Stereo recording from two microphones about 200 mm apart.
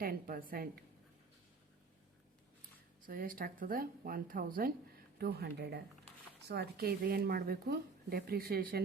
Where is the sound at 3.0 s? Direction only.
45° right (ahead or behind).